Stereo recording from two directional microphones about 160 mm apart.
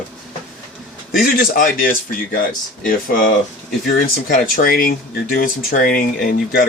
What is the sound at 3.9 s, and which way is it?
Speech, 60° left (ahead or behind).